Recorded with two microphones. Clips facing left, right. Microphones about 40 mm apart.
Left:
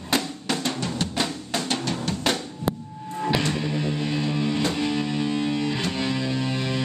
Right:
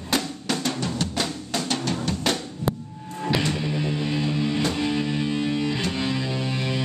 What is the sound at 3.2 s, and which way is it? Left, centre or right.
Music, centre.